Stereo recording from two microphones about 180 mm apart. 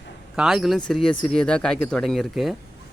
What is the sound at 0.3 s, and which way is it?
Speech, centre (ahead or behind).